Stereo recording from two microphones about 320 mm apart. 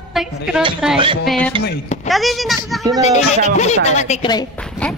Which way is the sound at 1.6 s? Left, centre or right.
Left.